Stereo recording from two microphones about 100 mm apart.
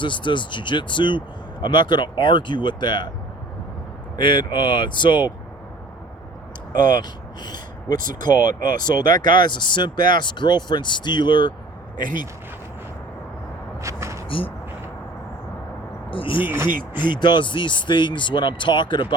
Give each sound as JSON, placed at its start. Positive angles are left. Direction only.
{"t": 0.0, "sound": "speech", "side_deg": 55}
{"t": 4.2, "sound": "speech", "side_deg": 50}
{"t": 7.4, "sound": "speech", "side_deg": 45}
{"t": 13.8, "sound": "a sound", "side_deg": -30}
{"t": 14.3, "sound": "speech", "side_deg": 65}
{"t": 16.0, "sound": "speech", "side_deg": 60}
{"t": 16.5, "sound": "speech", "side_deg": -20}
{"t": 17.0, "sound": "speech", "side_deg": 50}